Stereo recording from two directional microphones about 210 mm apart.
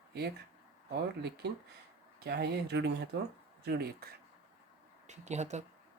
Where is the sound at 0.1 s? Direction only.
50° right (ahead or behind).